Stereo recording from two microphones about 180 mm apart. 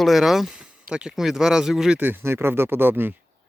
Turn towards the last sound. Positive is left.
turn(degrees=-10)  # may be behind; listen again after turning